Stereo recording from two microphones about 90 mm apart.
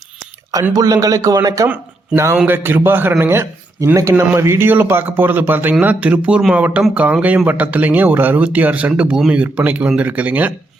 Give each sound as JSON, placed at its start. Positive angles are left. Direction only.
{"t": 0.7, "sound": "speech", "side_deg": -40}
{"t": 1.6, "sound": "speech", "side_deg": -25}
{"t": 3.8, "sound": "speech", "side_deg": -40}
{"t": 4.4, "sound": "speech", "side_deg": -25}